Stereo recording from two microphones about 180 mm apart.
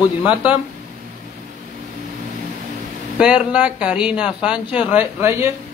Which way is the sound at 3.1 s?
5° right (ahead or behind).